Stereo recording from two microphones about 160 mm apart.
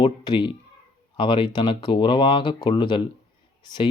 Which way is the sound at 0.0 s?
30° left (ahead or behind).